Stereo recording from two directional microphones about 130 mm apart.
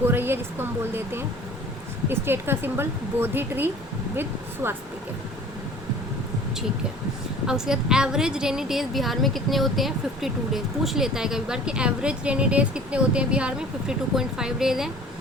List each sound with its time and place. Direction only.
0.0 s speech: 15° right (ahead or behind)
7.4 s a woman's voice: 5° right (ahead or behind)